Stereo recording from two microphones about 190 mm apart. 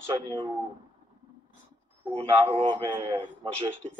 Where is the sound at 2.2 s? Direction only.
35° right (ahead or behind).